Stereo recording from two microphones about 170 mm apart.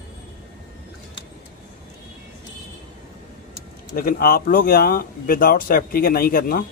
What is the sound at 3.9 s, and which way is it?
Speech, 60° left (ahead or behind).